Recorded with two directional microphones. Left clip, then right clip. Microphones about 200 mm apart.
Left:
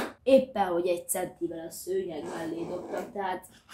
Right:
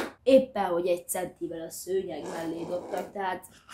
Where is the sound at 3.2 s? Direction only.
20° right (ahead or behind).